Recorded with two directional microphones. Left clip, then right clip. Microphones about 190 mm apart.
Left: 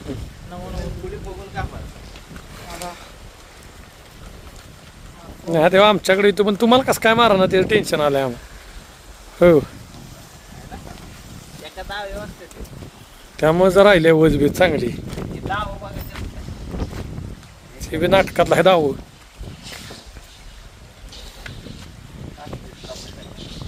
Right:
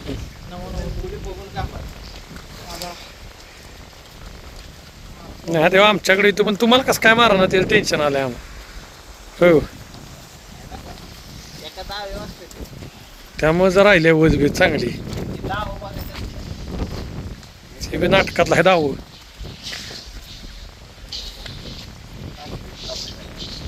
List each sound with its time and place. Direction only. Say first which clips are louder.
0.5 s speech: even; centre (ahead or behind)
5.5 s speech: left 1 dB; 15° left (ahead or behind)
9.4 s speech: left 1 dB; 5° left (ahead or behind)
11.8 s a sound: left 1 dB; centre (ahead or behind)
13.3 s speech: left 1 dB; 15° left (ahead or behind)
17.7 s speech: left 1 dB; 15° left (ahead or behind)
19.7 s walk: right 6 dB; 45° left (ahead or behind)
23.0 s a sound: right 5 dB; 55° left (ahead or behind)